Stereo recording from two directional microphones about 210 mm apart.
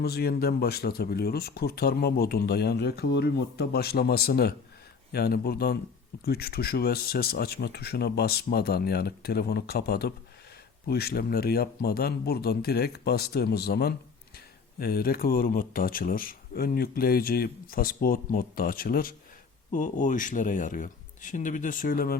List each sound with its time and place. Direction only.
0.0 s speech: 50° left (ahead or behind)